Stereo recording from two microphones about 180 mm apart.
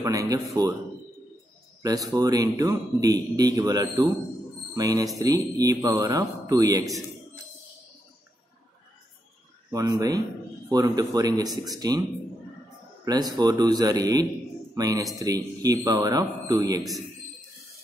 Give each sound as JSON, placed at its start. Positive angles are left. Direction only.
{"t": 0.0, "sound": "speech", "side_deg": -20}
{"t": 1.8, "sound": "speech", "side_deg": -20}
{"t": 9.7, "sound": "speech", "side_deg": -20}
{"t": 13.0, "sound": "speech", "side_deg": -20}